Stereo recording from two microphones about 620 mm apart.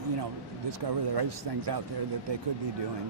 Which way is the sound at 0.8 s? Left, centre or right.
Right.